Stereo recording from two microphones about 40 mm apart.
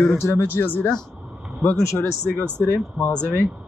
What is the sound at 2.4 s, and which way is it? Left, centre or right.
Speech, right.